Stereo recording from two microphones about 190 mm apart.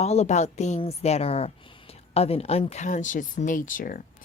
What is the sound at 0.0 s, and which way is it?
A woman's voice, 35° left (ahead or behind).